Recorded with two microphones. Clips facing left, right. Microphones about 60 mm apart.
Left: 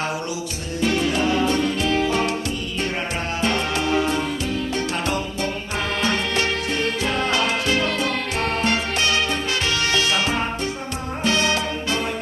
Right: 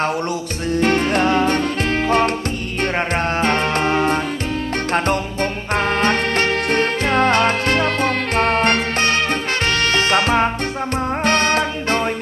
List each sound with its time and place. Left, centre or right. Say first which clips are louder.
0.8 s music: right 4 dB; right